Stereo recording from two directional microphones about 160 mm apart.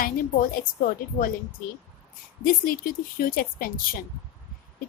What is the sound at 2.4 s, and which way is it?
A woman's voice, 60° left (ahead or behind).